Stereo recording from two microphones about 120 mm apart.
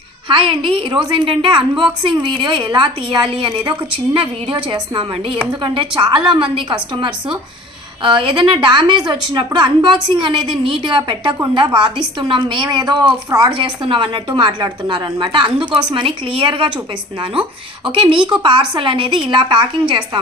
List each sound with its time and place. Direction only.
0.3 s a woman's voice: 45° right (ahead or behind)
17.8 s a woman's voice: 45° right (ahead or behind)